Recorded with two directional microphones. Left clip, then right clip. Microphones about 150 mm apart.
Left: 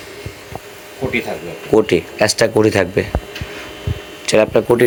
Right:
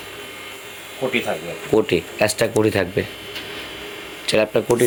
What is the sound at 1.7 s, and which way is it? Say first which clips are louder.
Speech: left 5 dB; centre (ahead or behind).